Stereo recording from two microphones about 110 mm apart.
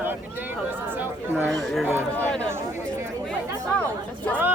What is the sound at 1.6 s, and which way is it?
Run, 5° left (ahead or behind).